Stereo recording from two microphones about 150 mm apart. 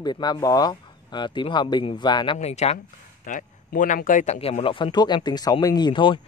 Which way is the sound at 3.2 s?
60° left (ahead or behind).